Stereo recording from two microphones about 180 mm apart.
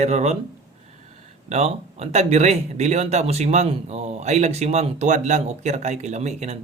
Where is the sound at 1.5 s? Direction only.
35° right (ahead or behind).